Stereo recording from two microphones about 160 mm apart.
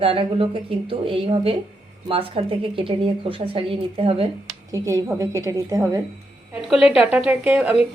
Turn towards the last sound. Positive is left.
turn(degrees=-10)  # may be behind; listen again after turning